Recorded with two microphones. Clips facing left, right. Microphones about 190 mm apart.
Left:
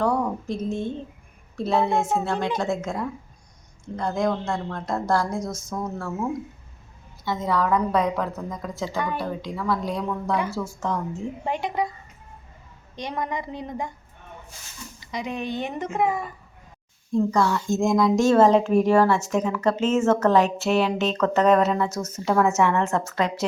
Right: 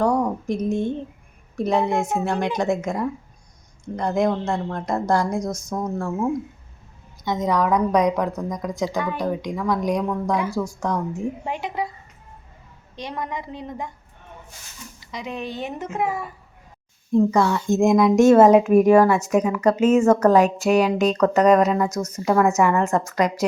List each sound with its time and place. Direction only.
0.0 s a woman's voice: 15° right (ahead or behind)
7.3 s a woman's voice: 20° right (ahead or behind)
11.4 s speech: 5° right (ahead or behind)
13.0 s speech: centre (ahead or behind)
15.0 s speech: centre (ahead or behind)
17.1 s a woman's voice: 20° right (ahead or behind)
21.8 s speech: 5° left (ahead or behind)
22.1 s a woman's voice: 5° right (ahead or behind)